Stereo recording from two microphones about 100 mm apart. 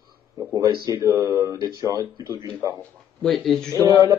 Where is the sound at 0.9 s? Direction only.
30° right (ahead or behind).